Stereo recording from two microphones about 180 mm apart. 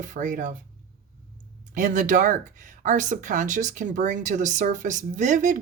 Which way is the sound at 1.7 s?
45° right (ahead or behind).